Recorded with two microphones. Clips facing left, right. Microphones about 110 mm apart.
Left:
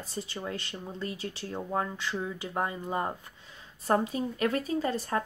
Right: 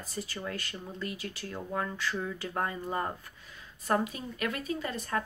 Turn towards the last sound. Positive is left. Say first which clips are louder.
# left 4 dB
turn(degrees=30)  # may be behind; listen again after turning